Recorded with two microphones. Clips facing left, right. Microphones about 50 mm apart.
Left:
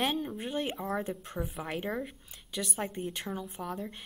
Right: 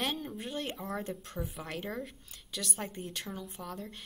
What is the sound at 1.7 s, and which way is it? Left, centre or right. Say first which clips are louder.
Speech: left 4 dB; centre.